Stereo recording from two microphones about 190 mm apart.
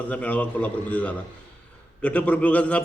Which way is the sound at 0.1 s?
5° left (ahead or behind).